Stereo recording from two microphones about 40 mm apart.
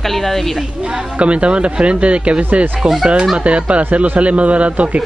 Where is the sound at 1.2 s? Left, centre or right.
Right.